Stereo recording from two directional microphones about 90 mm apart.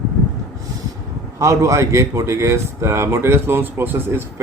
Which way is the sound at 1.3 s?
35° right (ahead or behind).